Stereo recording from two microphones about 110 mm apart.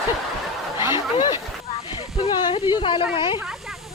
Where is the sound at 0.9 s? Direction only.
40° left (ahead or behind).